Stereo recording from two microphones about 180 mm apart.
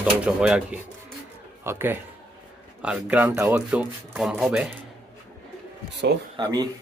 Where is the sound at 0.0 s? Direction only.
5° right (ahead or behind).